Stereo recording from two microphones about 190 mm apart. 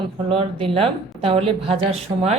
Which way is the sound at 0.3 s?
30° right (ahead or behind).